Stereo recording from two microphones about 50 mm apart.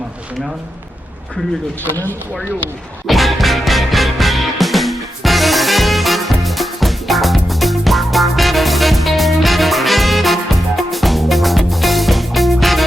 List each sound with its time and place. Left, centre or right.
3.1 s music: centre